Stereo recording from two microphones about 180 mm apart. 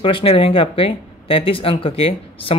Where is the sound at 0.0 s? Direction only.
30° left (ahead or behind).